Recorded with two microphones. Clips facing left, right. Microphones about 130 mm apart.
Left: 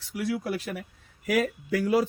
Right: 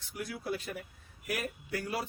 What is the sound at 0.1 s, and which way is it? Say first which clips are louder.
A man's voice: left 8 dB; 90° left.